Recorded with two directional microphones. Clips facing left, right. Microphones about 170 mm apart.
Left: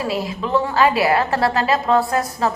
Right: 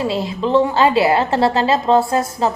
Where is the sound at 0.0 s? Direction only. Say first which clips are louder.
Right 3 dB; 25° right (ahead or behind).